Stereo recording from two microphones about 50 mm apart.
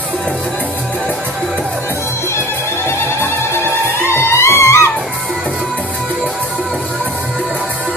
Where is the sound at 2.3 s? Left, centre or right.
Left.